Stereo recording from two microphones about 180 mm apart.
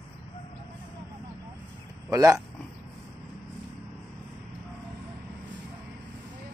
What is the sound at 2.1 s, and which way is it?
Speech, 20° right (ahead or behind).